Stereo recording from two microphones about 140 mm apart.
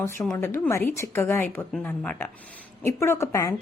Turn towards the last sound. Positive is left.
turn(degrees=20)  # may be behind; listen again after turning